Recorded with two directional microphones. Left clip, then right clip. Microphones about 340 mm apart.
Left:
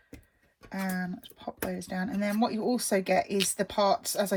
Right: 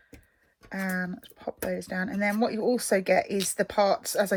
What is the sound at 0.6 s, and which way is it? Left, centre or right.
Speech, centre.